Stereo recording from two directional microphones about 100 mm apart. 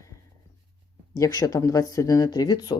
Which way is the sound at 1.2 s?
35° left (ahead or behind).